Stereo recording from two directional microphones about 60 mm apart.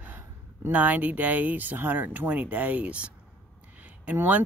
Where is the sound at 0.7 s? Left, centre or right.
Right.